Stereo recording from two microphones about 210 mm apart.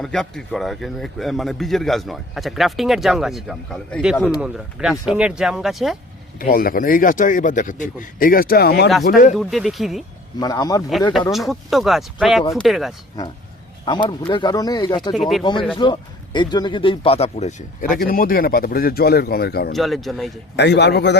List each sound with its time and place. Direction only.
0.0 s a man's voice: centre (ahead or behind)
6.4 s speech: 45° left (ahead or behind)
9.3 s a man's voice: centre (ahead or behind)
10.4 s speech: 20° left (ahead or behind)
11.3 s a man's voice: centre (ahead or behind)
13.2 s speech: 15° left (ahead or behind)
15.1 s a man's voice: centre (ahead or behind)
15.8 s speech: 20° left (ahead or behind); by 19.7 s 50° left (ahead or behind)
19.7 s a man's voice: centre (ahead or behind)
20.6 s speech: 55° left (ahead or behind)